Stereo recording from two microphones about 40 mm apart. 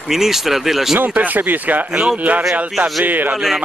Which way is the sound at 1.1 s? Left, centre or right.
Right.